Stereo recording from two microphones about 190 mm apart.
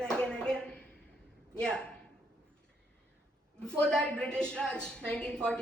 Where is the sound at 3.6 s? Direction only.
5° left (ahead or behind).